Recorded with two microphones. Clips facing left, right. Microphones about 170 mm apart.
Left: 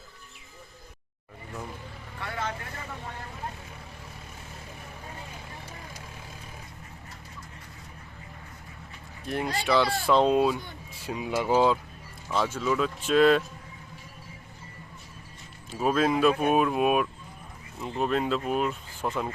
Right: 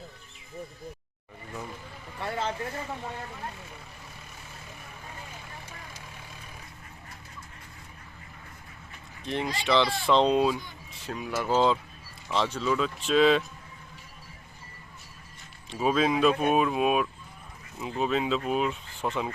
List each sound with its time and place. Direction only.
2.2 s vehicle: 25° right (ahead or behind)
9.2 s speech: 5° left (ahead or behind)
11.0 s speech: 15° left (ahead or behind)
15.7 s speech: centre (ahead or behind)